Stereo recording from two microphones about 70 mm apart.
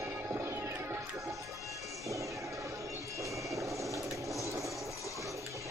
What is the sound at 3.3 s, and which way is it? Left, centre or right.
Vehicle, right.